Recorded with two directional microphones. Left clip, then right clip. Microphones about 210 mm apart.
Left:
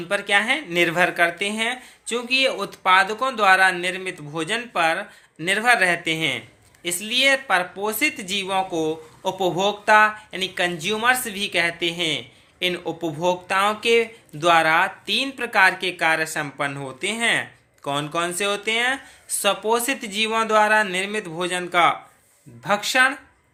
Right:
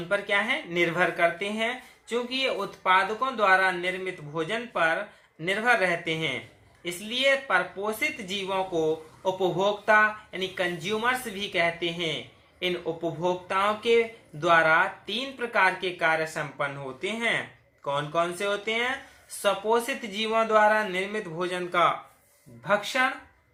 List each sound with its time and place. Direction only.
0.1 s speech: 50° left (ahead or behind)